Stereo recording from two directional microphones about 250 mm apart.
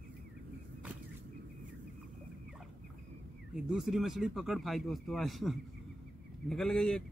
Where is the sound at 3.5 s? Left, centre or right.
Centre.